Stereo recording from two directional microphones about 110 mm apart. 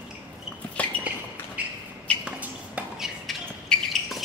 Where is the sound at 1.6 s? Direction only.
15° right (ahead or behind).